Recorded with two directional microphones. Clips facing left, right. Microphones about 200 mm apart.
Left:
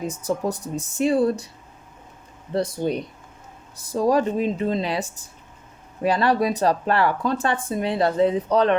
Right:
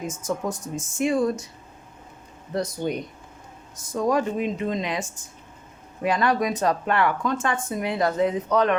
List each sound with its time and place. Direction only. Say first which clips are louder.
0.0 s speech: left 3 dB; 35° left (ahead or behind)
2.5 s speech: left 3 dB; 30° left (ahead or behind)